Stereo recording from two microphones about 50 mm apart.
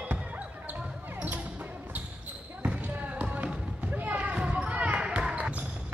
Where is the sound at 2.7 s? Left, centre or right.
Right.